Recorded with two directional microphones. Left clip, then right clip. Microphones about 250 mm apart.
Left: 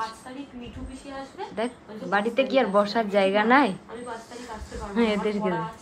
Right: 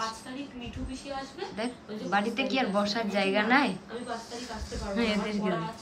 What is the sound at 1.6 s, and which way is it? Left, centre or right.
A woman's voice, centre.